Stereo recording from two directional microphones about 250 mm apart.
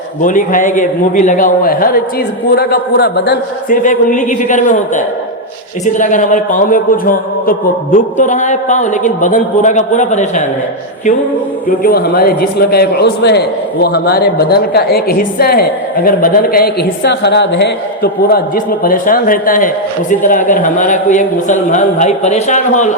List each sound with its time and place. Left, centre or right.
0.2 s a woman's voice: left
11.8 s a woman's voice: left